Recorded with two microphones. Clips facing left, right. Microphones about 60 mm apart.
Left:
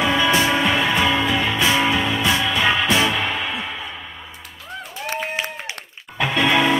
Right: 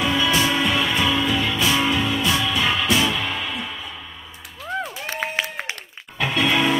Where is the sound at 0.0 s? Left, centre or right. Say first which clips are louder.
Left 2 dB; left.